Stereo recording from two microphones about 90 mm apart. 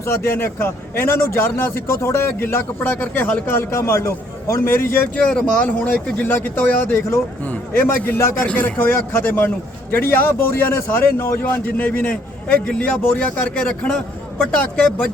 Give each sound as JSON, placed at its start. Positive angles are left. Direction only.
{"t": 0.0, "sound": "a man's voice", "side_deg": 30}
{"t": 3.7, "sound": "a man's voice", "side_deg": 30}
{"t": 5.2, "sound": "a man's voice", "side_deg": 10}